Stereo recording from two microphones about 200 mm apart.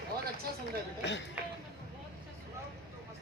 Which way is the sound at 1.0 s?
65° left (ahead or behind).